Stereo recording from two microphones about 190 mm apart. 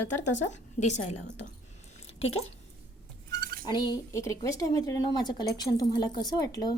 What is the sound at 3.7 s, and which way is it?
A woman's voice, 20° left (ahead or behind).